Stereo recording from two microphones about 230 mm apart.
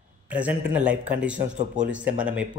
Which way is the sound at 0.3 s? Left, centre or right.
Centre.